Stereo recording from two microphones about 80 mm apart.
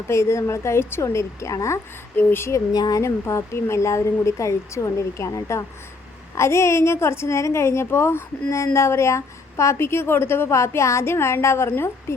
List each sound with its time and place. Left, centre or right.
0.1 s a woman's voice: left
2.7 s speech: left
3.0 s a woman's voice: left